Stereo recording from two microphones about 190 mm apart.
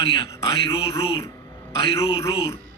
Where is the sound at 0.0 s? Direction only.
25° left (ahead or behind).